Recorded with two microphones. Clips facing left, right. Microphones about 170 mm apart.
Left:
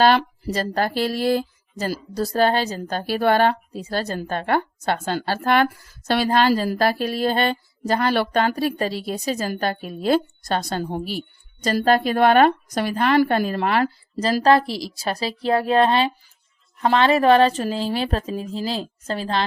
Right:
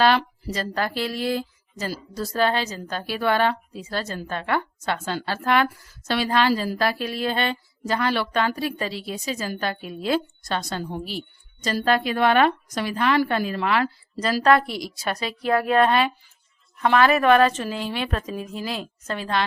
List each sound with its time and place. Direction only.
0.0 s a woman's voice: 35° left (ahead or behind)
14.4 s a woman's voice: 30° left (ahead or behind)